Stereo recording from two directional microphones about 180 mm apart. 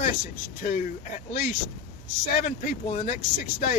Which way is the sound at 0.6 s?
45° left (ahead or behind).